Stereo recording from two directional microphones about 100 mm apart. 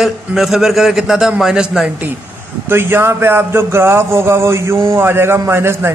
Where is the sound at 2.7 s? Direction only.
25° right (ahead or behind).